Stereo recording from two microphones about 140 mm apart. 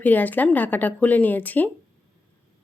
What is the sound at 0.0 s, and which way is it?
A woman's voice, 10° left (ahead or behind).